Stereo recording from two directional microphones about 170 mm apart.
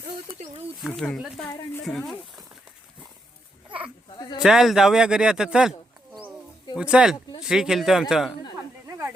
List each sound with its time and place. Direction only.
0.3 s speech: 45° right (ahead or behind)
0.8 s speech: centre (ahead or behind)
3.7 s a sound: 10° right (ahead or behind)
4.4 s speech: 5° right (ahead or behind)
6.7 s speech: 5° right (ahead or behind)